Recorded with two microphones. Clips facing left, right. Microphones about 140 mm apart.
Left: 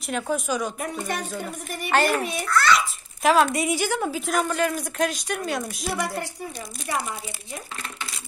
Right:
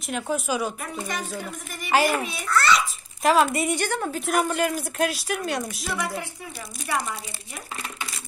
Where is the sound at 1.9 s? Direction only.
5° right (ahead or behind).